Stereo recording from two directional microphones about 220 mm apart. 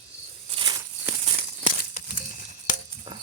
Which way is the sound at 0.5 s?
20° right (ahead or behind).